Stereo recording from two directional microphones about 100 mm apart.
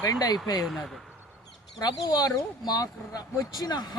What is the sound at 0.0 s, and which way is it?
Speech, 40° left (ahead or behind).